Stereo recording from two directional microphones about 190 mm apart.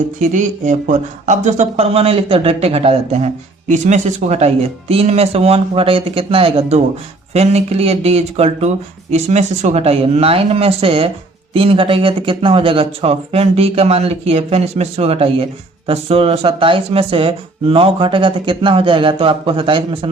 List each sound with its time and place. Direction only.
0.2 s speech: 40° right (ahead or behind)